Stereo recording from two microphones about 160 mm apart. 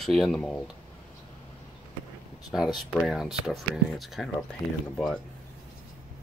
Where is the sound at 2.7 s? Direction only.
Centre (ahead or behind).